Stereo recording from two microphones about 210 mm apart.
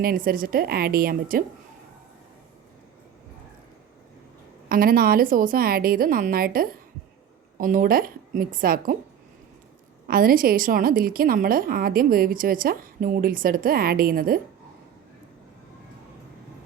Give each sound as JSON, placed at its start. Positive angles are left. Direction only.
{"t": 0.0, "sound": "a woman's voice", "side_deg": -45}
{"t": 4.7, "sound": "a woman's voice", "side_deg": -45}
{"t": 10.1, "sound": "a woman's voice", "side_deg": -45}